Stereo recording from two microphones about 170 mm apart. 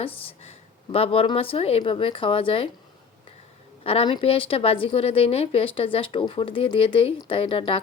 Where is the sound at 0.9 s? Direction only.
35° left (ahead or behind).